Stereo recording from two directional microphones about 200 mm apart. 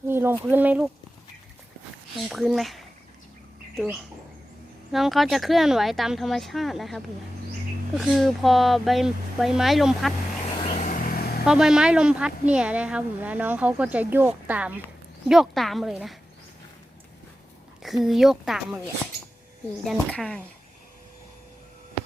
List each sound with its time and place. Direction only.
0.1 s a sound: 10° right (ahead or behind)
0.5 s a woman's voice: 5° right (ahead or behind)
2.1 s speech: centre (ahead or behind)
4.9 s speech: centre (ahead or behind)
10.6 s vehicle: 35° left (ahead or behind)
11.4 s a woman's voice: 5° right (ahead or behind)
17.8 s speech: centre (ahead or behind)
19.8 s speech: 5° left (ahead or behind)